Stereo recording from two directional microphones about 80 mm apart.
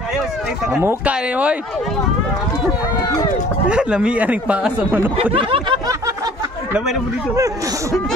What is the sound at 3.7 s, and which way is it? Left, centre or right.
Speech, centre.